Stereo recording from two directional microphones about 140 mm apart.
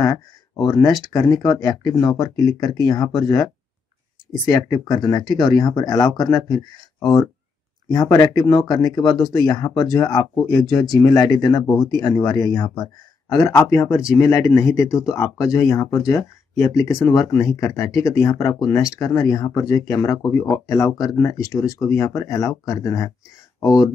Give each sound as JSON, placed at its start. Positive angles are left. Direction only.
{"t": 0.0, "sound": "speech", "side_deg": 25}
{"t": 4.5, "sound": "speech", "side_deg": 25}